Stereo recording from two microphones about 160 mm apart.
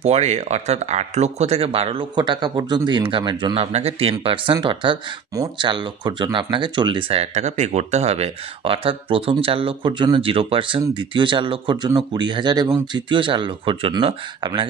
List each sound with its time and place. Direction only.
0.0 s speech: 40° right (ahead or behind)